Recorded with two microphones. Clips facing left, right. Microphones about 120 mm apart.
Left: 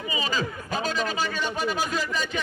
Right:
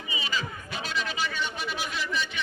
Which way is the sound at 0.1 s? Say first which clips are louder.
Left 4 dB; 40° left (ahead or behind).